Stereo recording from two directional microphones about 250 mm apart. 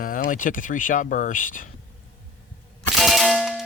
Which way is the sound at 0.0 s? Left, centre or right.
Left.